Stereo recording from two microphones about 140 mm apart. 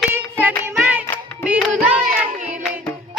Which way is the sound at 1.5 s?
10° right (ahead or behind).